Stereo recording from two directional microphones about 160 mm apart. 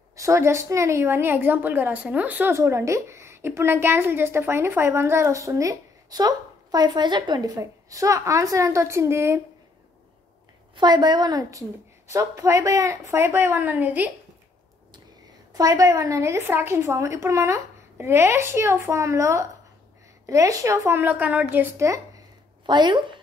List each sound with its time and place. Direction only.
0.1 s a woman's voice: 20° right (ahead or behind)
10.8 s a woman's voice: 25° right (ahead or behind); by 14.1 s 10° right (ahead or behind)
15.5 s a woman's voice: 25° right (ahead or behind)